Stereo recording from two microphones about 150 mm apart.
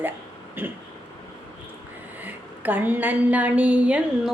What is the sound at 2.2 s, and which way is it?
A woman's voice, 10° right (ahead or behind).